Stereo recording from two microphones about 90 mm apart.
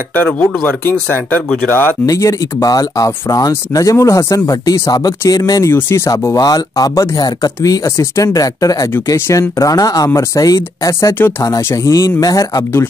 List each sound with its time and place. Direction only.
0.1 s speech: 20° left (ahead or behind)
2.0 s speech: 40° left (ahead or behind)
5.8 s speech: 30° left (ahead or behind)
6.3 s speech: 45° left (ahead or behind)